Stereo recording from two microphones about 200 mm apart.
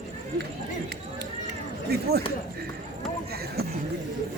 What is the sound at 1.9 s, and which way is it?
Speech, 50° right (ahead or behind).